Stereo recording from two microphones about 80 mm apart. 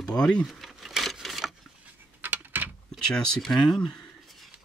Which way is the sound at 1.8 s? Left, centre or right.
Right.